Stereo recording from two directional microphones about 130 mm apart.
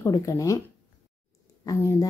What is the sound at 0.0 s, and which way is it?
Speech, 25° left (ahead or behind).